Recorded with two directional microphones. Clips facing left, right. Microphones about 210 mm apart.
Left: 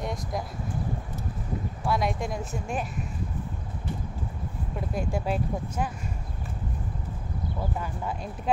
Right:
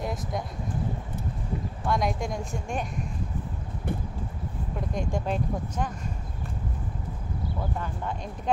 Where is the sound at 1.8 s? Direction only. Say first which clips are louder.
Even; centre (ahead or behind).